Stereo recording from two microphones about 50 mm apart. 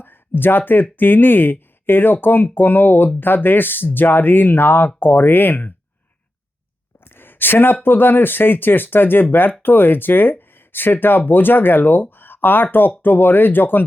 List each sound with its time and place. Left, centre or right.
0.0 s speech: left
7.0 s speech: left
12.1 s a sound: left
13.0 s speech: left